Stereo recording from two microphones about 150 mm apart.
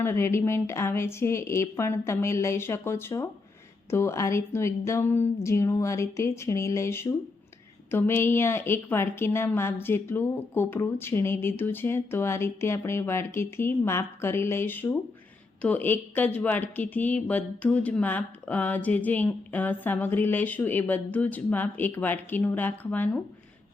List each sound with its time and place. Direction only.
0.0 s a woman's voice: 15° left (ahead or behind)